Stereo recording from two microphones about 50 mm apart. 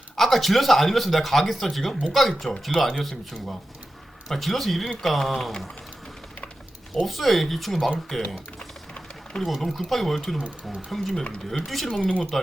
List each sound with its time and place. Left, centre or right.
0.2 s speech: centre
4.3 s speech: centre
7.0 s speech: centre
8.5 s a sound: centre
9.6 s speech: centre
11.9 s speech: left